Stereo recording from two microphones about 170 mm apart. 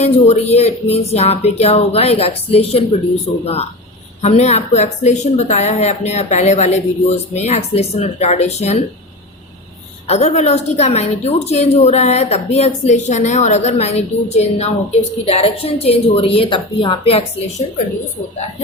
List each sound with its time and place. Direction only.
0.0 s a woman's voice: 40° left (ahead or behind)
10.1 s a woman's voice: 40° left (ahead or behind)